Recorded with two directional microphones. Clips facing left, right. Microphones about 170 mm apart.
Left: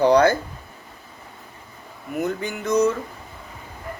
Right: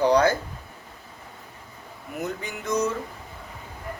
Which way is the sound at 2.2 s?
60° left (ahead or behind).